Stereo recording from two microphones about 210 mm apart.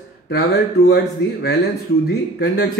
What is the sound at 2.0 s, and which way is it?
Speech, 50° left (ahead or behind).